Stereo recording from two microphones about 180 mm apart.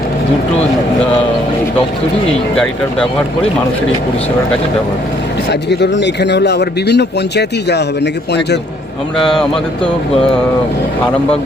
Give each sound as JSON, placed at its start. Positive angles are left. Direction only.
{"t": 5.5, "sound": "speech", "side_deg": 70}
{"t": 9.1, "sound": "speech", "side_deg": 5}